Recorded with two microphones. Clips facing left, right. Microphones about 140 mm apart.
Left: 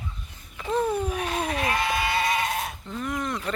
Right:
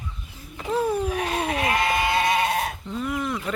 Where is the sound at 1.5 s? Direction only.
20° right (ahead or behind).